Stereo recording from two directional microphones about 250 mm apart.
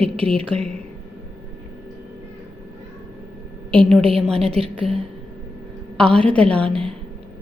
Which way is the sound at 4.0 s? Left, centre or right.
Right.